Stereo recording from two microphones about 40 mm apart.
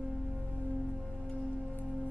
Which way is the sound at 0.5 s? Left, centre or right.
Left.